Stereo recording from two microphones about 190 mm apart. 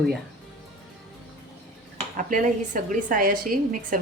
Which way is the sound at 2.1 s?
45° right (ahead or behind).